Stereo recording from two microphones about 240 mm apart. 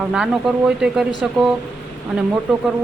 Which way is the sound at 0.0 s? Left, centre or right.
Centre.